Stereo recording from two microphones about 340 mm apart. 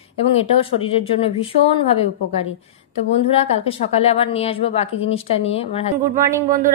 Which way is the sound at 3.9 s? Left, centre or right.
Centre.